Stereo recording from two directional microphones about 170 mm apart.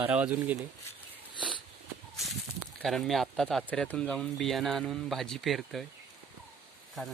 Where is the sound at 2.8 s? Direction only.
Centre (ahead or behind).